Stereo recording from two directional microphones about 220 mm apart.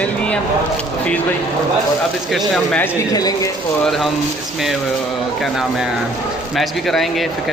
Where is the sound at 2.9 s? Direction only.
15° left (ahead or behind).